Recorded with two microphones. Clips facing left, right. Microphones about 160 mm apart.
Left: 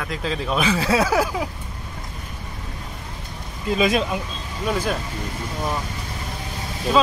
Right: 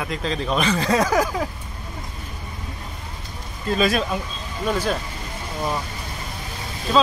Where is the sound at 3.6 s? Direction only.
15° left (ahead or behind).